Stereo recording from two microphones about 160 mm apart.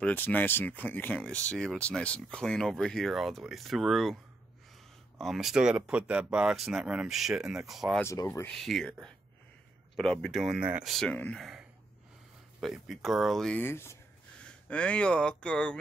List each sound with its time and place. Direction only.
0.0 s speech: 10° left (ahead or behind)
5.2 s speech: centre (ahead or behind)
8.0 s speech: 15° left (ahead or behind)
8.5 s speech: centre (ahead or behind)
9.9 s speech: 5° left (ahead or behind)
12.5 s speech: centre (ahead or behind)